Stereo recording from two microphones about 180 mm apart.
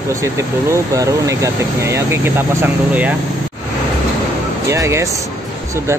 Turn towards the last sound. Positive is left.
turn(degrees=-15)  # may be behind; listen again after turning